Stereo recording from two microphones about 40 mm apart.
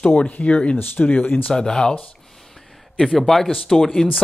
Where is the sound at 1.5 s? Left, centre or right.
Centre.